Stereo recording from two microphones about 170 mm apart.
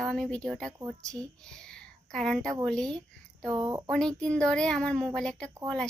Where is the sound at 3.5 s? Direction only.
20° right (ahead or behind).